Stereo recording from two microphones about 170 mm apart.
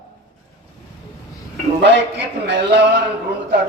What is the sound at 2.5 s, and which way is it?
Speech, 90° right.